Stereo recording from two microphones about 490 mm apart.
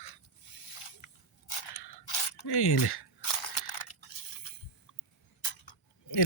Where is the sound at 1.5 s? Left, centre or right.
Left.